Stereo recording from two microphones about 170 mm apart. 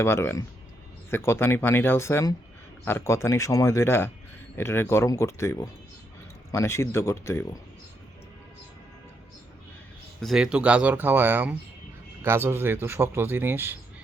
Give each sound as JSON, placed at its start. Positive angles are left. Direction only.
{"t": 0.0, "sound": "speech", "side_deg": 15}
{"t": 10.2, "sound": "speech", "side_deg": 0}